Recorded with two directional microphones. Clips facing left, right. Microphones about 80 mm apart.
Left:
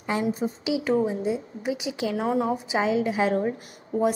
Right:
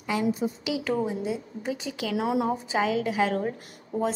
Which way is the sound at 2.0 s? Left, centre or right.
Left.